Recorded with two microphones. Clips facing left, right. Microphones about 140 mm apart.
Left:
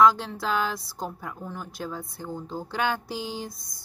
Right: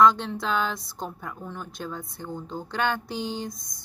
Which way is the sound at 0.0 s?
5° left (ahead or behind).